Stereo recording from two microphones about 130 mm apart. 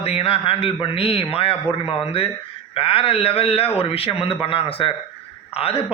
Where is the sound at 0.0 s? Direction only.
50° left (ahead or behind).